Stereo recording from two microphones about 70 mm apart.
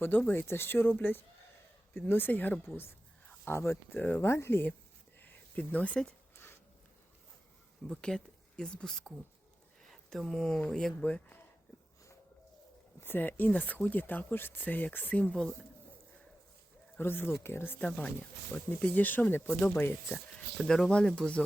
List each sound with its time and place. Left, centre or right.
0.0 s speech: left
3.4 s speech: left
3.9 s speech: left
4.2 s speech: left
5.2 s a sound: left
6.3 s a sound: left
7.9 s speech: centre
11.0 s speech: left
13.0 s speech: left
17.0 s speech: left
17.9 s speech: centre
20.7 s speech: centre